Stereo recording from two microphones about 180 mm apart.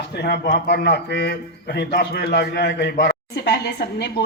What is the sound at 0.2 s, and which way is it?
A man's voice, 65° left (ahead or behind).